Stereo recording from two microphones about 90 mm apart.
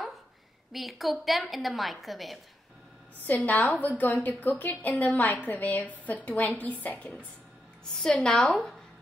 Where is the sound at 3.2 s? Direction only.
20° left (ahead or behind).